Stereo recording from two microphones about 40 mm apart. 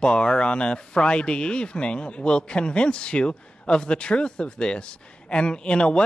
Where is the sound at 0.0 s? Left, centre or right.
Left.